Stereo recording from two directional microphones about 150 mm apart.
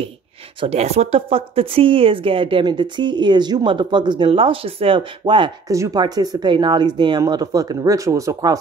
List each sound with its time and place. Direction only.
0.6 s a woman's voice: 45° right (ahead or behind); by 8.5 s 25° right (ahead or behind)